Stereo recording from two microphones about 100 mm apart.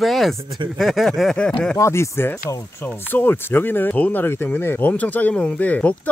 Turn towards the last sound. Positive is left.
turn(degrees=15)  # may be behind; listen again after turning